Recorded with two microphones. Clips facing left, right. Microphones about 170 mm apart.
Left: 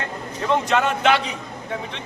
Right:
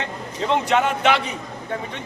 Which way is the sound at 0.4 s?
15° right (ahead or behind).